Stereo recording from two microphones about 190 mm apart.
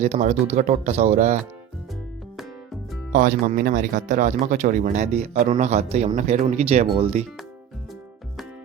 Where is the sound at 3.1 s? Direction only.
45° right (ahead or behind).